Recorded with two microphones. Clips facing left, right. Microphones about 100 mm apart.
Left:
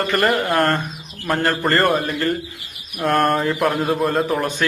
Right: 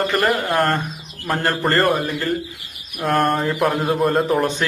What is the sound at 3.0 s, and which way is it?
A man's voice, centre (ahead or behind).